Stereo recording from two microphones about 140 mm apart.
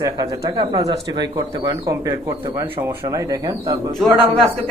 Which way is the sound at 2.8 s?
25° right (ahead or behind).